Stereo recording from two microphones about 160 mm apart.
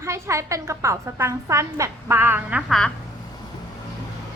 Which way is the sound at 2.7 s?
Centre (ahead or behind).